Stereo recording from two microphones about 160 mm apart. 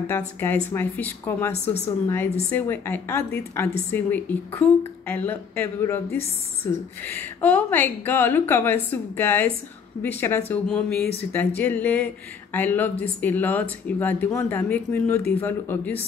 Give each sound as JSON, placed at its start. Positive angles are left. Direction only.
{"t": 0.4, "sound": "speech", "side_deg": 15}